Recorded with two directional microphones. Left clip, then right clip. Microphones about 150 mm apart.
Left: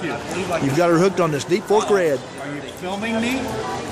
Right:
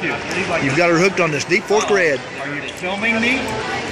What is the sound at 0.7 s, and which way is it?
Speech, 25° left (ahead or behind).